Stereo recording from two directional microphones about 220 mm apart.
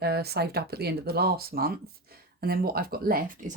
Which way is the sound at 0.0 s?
45° right (ahead or behind).